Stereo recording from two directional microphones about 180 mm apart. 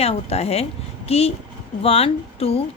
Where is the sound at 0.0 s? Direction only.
35° left (ahead or behind).